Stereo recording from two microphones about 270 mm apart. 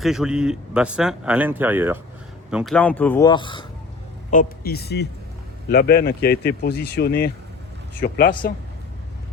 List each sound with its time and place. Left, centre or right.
0.0 s speech: centre
4.3 s speech: left